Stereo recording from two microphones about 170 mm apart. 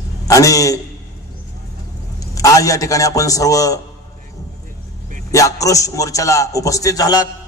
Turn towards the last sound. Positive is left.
turn(degrees=20)  # may be behind; listen again after turning